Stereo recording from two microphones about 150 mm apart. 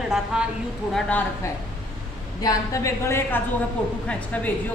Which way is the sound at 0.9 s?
10° left (ahead or behind).